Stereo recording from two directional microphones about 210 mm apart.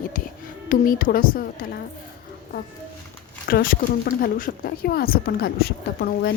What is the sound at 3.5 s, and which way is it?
A woman's voice, 45° left (ahead or behind).